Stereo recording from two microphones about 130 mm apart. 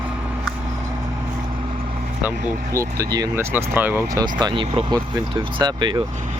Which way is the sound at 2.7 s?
25° right (ahead or behind).